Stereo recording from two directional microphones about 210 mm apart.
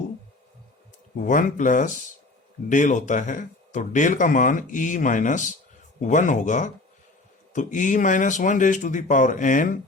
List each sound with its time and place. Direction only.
1.1 s speech: 40° left (ahead or behind)